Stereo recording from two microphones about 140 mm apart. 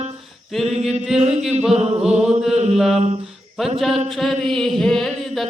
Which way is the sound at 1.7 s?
50° right (ahead or behind).